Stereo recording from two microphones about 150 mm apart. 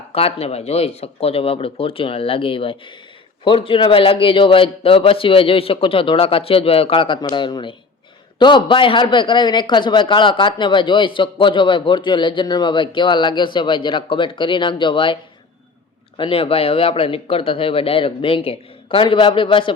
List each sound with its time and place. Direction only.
0.1 s a man's voice: 40° left (ahead or behind)